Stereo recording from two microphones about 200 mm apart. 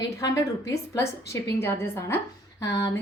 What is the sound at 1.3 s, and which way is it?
A woman's voice, 15° left (ahead or behind).